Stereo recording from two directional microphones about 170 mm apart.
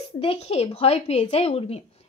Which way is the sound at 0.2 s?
35° left (ahead or behind).